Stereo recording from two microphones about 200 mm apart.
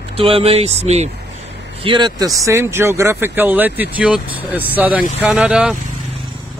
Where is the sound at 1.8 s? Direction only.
25° right (ahead or behind).